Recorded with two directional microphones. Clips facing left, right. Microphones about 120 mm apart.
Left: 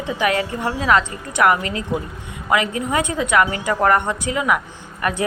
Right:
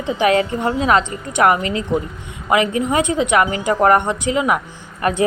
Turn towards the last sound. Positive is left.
turn(degrees=-25)  # may be behind; listen again after turning